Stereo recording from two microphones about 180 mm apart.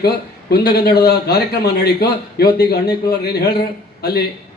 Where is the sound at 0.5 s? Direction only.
60° left (ahead or behind).